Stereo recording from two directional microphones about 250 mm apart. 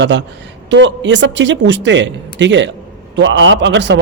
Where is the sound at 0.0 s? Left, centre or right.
Right.